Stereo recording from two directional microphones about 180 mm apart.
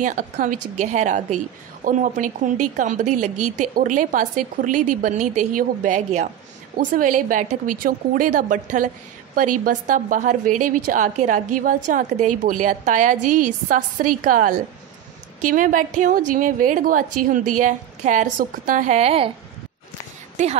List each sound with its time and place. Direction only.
0.0 s a woman's voice: 45° right (ahead or behind)
20.4 s speech: 40° right (ahead or behind)